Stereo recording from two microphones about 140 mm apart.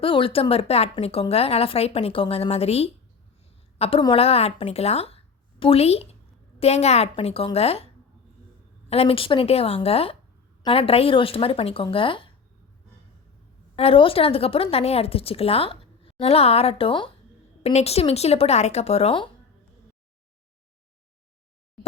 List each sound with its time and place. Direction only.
0.0 s a woman's voice: 40° left (ahead or behind)
8.9 s speech: 45° left (ahead or behind)
13.7 s speech: 40° left (ahead or behind)